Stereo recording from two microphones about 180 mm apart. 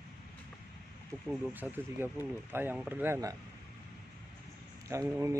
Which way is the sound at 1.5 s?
10° right (ahead or behind).